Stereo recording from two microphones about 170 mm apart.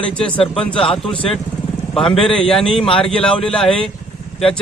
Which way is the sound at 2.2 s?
5° left (ahead or behind).